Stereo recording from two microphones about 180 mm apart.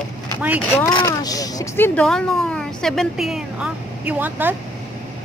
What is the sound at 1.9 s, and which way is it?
A woman's voice, 5° left (ahead or behind).